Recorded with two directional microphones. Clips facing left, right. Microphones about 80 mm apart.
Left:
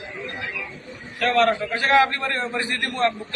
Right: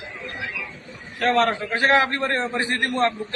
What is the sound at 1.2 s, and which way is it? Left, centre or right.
A man's voice, right.